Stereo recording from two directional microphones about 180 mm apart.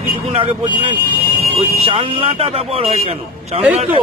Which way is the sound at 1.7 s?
35° right (ahead or behind).